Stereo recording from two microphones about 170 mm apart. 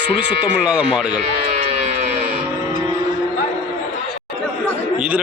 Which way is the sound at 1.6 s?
40° right (ahead or behind).